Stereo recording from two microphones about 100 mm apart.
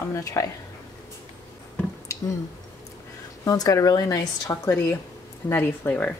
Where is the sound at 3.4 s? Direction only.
35° left (ahead or behind).